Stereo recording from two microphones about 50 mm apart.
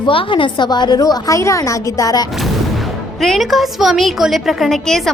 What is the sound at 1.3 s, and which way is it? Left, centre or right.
Speech, left.